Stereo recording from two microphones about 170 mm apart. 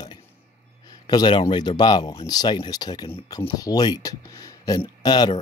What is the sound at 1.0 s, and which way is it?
Speech, 25° left (ahead or behind).